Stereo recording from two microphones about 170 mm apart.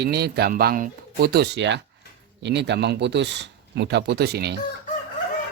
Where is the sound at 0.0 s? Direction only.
70° right (ahead or behind).